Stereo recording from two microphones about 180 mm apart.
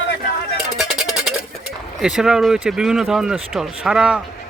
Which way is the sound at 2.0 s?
5° right (ahead or behind).